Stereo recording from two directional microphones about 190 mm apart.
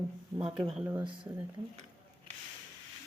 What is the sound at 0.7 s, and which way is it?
Speech, 5° right (ahead or behind).